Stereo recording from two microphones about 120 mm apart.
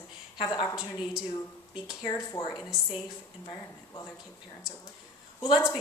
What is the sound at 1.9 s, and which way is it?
A woman's voice, 30° left (ahead or behind).